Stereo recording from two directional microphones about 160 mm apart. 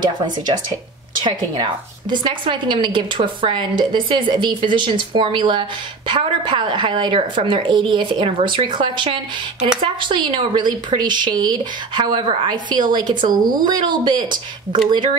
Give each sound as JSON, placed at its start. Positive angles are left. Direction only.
{"t": 0.0, "sound": "a woman's voice", "side_deg": -25}